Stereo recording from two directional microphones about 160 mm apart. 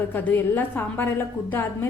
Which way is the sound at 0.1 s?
10° left (ahead or behind).